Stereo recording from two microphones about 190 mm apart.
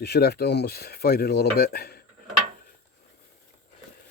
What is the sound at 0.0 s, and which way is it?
Speech, 55° left (ahead or behind).